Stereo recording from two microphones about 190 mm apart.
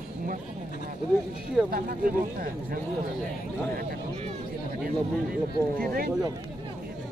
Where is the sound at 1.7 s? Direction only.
50° right (ahead or behind).